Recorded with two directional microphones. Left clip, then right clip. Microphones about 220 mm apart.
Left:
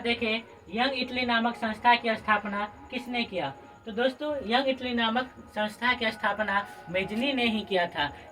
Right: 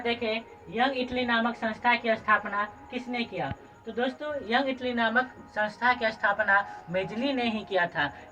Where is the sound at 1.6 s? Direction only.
35° left (ahead or behind).